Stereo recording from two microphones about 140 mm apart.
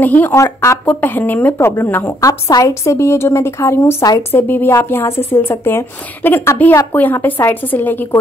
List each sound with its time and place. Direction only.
0.0 s speech: 15° left (ahead or behind)